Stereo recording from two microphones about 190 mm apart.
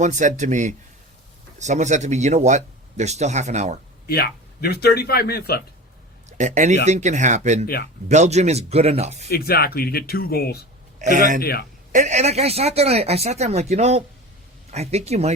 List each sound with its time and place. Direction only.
0.0 s speech: 40° right (ahead or behind)
4.0 s a man's voice: 55° left (ahead or behind)
6.3 s speech: 40° right (ahead or behind)
9.3 s a man's voice: 55° left (ahead or behind)
11.0 s speech: 40° right (ahead or behind)